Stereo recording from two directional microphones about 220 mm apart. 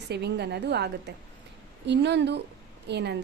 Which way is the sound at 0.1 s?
50° right (ahead or behind).